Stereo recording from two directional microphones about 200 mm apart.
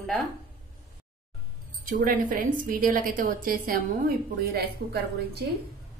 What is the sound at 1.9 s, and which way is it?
A woman's voice, 45° right (ahead or behind).